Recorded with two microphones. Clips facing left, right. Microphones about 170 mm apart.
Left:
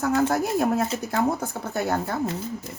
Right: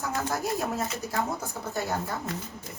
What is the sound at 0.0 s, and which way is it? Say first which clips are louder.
Speech: left 8 dB; 60° left (ahead or behind).